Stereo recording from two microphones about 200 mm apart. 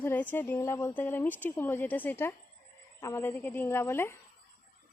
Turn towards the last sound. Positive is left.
turn(degrees=10)  # may be behind; listen again after turning